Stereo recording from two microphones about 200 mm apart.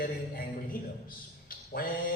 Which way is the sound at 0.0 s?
45° left (ahead or behind).